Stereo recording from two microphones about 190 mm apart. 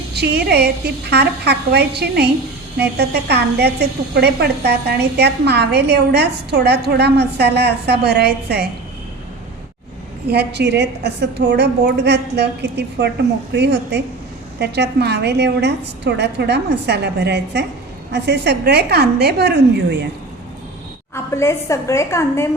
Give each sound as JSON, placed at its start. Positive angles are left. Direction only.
{"t": 0.1, "sound": "a woman's voice", "side_deg": -60}
{"t": 10.2, "sound": "a woman's voice", "side_deg": -60}
{"t": 21.3, "sound": "a woman's voice", "side_deg": 15}